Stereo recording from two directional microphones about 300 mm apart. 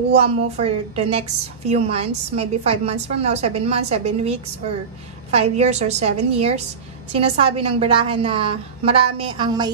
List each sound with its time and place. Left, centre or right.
0.2 s a woman's voice: centre